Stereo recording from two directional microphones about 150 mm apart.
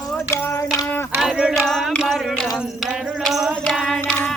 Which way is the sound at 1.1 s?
Centre (ahead or behind).